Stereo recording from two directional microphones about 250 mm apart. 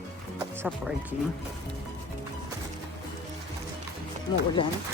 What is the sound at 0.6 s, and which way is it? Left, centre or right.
Female singing, centre.